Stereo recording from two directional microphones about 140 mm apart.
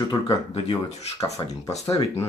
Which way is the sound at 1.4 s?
30° left (ahead or behind).